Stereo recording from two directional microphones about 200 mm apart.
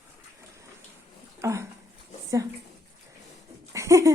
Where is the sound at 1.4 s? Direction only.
15° right (ahead or behind).